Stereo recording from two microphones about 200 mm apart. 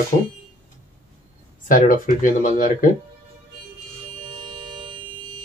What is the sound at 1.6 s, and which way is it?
Speech, 45° left (ahead or behind).